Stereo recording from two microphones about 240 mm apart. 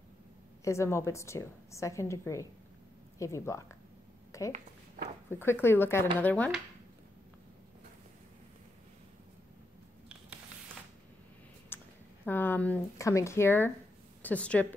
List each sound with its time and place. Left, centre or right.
0.7 s a woman's voice: centre
4.5 s speech: right
5.3 s a woman's voice: centre
11.7 s a sound: centre
12.3 s a woman's voice: centre